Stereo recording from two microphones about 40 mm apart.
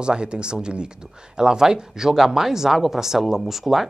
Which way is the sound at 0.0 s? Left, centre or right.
Right.